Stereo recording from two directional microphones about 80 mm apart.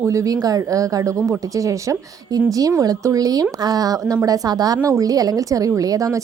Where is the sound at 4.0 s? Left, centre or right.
Right.